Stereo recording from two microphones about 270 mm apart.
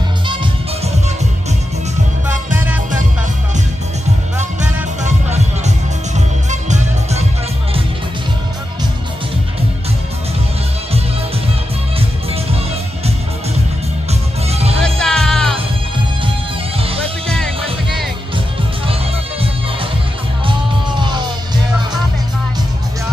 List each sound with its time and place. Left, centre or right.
2.5 s music: centre
4.4 s music: right
14.5 s music: right
14.8 s music: centre
20.4 s music: centre